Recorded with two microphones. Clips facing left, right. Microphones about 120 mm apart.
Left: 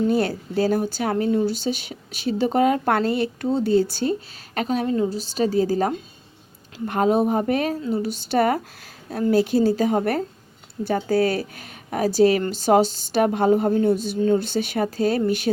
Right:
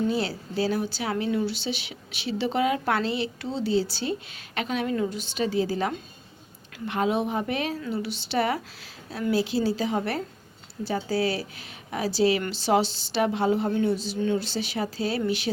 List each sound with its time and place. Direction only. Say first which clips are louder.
0.1 s a woman's voice: left 6 dB; 50° left (ahead or behind)
13.9 s speech: left 6 dB; 55° left (ahead or behind)